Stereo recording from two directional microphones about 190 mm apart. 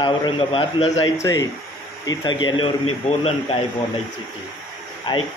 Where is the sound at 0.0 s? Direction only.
25° left (ahead or behind).